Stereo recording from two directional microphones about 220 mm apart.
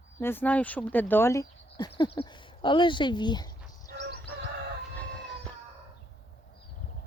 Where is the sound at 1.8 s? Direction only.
25° left (ahead or behind).